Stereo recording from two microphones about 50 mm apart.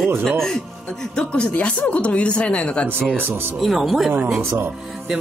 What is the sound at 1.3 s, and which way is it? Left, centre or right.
Speech, left.